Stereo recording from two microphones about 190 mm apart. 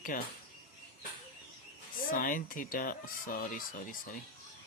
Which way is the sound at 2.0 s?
45° left (ahead or behind).